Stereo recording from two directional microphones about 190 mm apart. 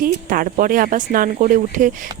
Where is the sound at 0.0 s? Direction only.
50° right (ahead or behind).